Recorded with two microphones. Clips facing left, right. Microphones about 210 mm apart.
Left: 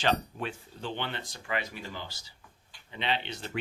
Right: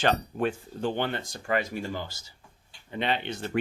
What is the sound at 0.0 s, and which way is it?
Speech, 50° right (ahead or behind).